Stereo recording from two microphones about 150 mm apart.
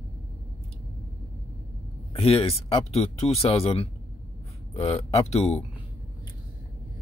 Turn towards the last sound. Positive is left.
turn(degrees=45)  # may be behind; listen again after turning